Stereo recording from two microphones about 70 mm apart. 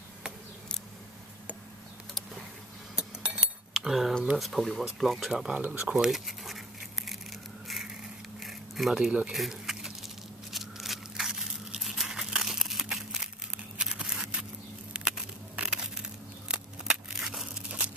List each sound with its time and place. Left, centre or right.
3.7 s cutlery: centre
4.4 s speech: centre
5.6 s speech: right
5.9 s crumpling: centre
7.6 s a sound: centre
17.6 s crumpling: centre